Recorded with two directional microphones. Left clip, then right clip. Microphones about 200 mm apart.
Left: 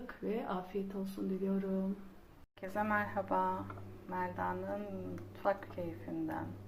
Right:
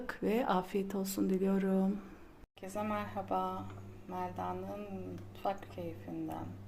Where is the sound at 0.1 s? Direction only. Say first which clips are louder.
Right 6 dB; 65° right (ahead or behind).